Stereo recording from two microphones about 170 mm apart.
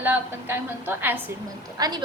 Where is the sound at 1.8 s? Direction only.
25° right (ahead or behind).